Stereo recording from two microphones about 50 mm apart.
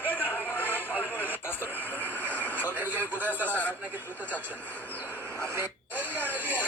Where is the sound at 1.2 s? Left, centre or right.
Left.